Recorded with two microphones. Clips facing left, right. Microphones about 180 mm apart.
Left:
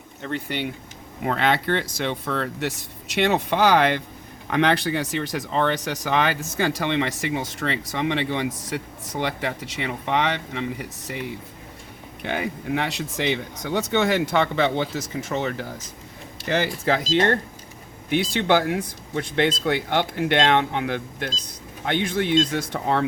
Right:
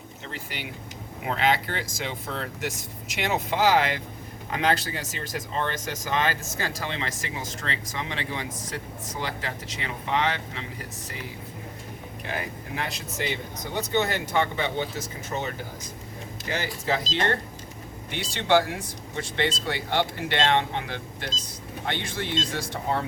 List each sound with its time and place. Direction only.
0.2 s speech: 60° left (ahead or behind)
16.5 s speech: 65° left (ahead or behind)
17.1 s speech: 55° left (ahead or behind)